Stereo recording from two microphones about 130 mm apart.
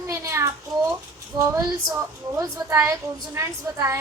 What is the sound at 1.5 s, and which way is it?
A woman's voice, 25° right (ahead or behind).